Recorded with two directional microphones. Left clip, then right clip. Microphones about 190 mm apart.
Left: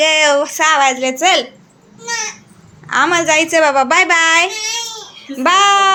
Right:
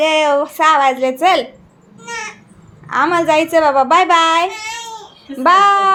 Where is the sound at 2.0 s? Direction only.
10° right (ahead or behind).